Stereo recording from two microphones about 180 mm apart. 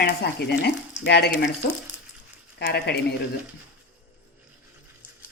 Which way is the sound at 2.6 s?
65° left (ahead or behind).